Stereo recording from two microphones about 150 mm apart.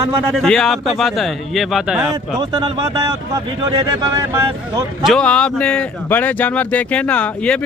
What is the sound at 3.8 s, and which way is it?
Speech, 25° right (ahead or behind).